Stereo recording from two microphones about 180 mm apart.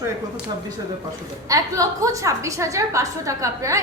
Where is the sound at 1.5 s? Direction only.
20° right (ahead or behind).